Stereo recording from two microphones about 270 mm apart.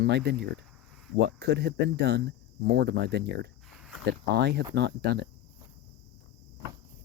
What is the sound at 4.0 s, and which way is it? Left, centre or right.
Speech, right.